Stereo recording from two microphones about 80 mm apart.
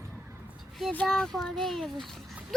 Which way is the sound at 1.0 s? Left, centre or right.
Centre.